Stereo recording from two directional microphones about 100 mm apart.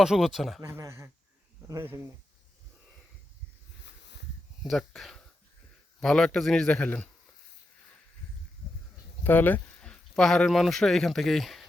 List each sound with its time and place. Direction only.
0.0 s a man's voice: 5° right (ahead or behind)
0.6 s speech: 30° right (ahead or behind)
4.6 s a man's voice: centre (ahead or behind)
9.2 s speech: 20° left (ahead or behind)
9.8 s speech: 5° left (ahead or behind)